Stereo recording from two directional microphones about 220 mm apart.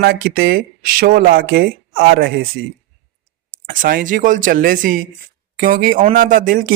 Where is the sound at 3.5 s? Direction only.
40° right (ahead or behind).